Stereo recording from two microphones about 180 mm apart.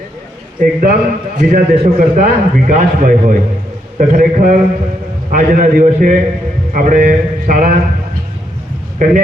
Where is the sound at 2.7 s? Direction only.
50° right (ahead or behind).